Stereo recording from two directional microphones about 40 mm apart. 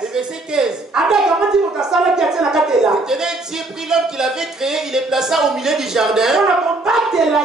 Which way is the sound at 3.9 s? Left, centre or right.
Centre.